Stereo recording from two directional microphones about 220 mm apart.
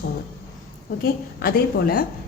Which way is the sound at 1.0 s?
40° left (ahead or behind).